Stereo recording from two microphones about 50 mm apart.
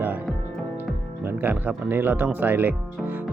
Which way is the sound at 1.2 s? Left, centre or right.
Right.